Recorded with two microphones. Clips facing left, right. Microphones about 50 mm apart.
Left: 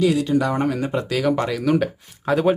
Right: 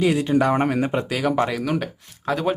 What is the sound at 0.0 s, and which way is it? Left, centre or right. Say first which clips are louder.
Speech: even; right.